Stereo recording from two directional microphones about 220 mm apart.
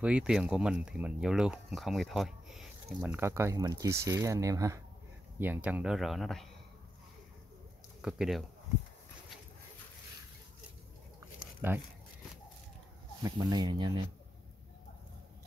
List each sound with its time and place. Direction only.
0.0 s speech: 5° right (ahead or behind)
8.0 s speech: centre (ahead or behind)
11.6 s speech: 10° right (ahead or behind)
13.2 s speech: 20° right (ahead or behind)